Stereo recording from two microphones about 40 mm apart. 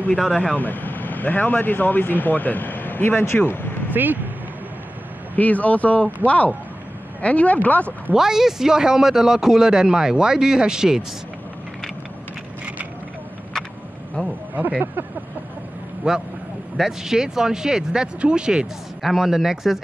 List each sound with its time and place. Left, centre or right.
0.6 s speech: left
3.9 s speech: right
5.3 s speech: left
8.1 s a man's voice: centre
14.2 s speech: right
16.0 s a man's voice: right
19.0 s a man's voice: centre